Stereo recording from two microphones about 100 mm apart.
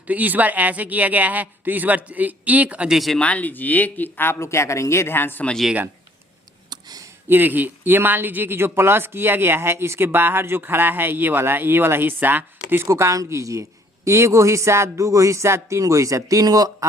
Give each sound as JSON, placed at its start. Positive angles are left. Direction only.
{"t": 0.1, "sound": "speech", "side_deg": -15}
{"t": 3.0, "sound": "speech", "side_deg": 0}
{"t": 3.2, "sound": "speech", "side_deg": 15}
{"t": 6.7, "sound": "a sound", "side_deg": -40}
{"t": 7.3, "sound": "speech", "side_deg": -20}